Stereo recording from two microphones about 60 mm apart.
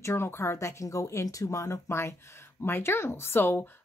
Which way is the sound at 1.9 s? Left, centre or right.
Left.